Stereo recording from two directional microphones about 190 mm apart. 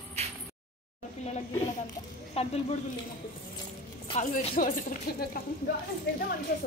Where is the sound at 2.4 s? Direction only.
30° left (ahead or behind).